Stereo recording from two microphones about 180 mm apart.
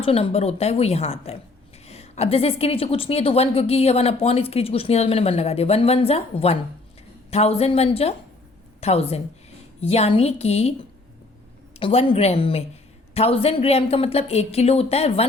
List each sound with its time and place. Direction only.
0.0 s a woman's voice: 35° left (ahead or behind)
11.8 s a woman's voice: 30° left (ahead or behind)